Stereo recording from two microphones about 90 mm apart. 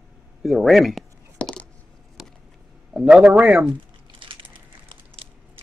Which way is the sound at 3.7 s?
70° right (ahead or behind).